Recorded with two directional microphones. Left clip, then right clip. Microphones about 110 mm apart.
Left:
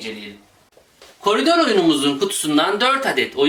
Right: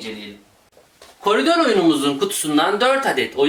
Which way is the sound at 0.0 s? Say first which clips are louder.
Left 1 dB; centre (ahead or behind).